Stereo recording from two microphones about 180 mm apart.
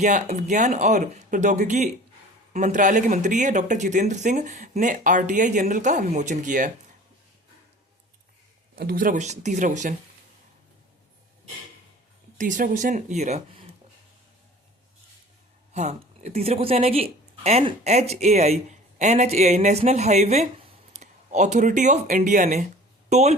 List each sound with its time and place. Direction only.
0.0 s speech: 45° right (ahead or behind)
8.7 s speech: 55° right (ahead or behind); by 9.9 s 40° right (ahead or behind)
12.4 s speech: 45° right (ahead or behind)
15.7 s speech: 40° right (ahead or behind)